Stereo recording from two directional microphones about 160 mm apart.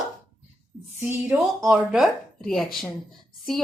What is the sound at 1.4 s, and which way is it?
A woman's voice, centre (ahead or behind).